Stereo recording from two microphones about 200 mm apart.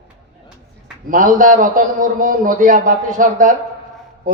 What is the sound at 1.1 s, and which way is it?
A man's voice, 40° right (ahead or behind).